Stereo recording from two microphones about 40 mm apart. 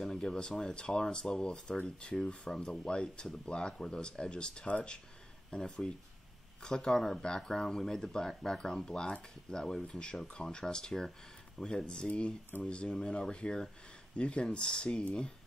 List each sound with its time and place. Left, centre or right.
0.0 s speech: centre
2.5 s speech: centre